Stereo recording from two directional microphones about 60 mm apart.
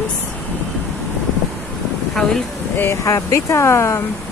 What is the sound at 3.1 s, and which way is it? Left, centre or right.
Speech, left.